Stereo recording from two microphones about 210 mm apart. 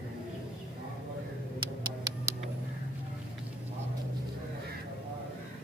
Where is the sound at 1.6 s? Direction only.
15° right (ahead or behind).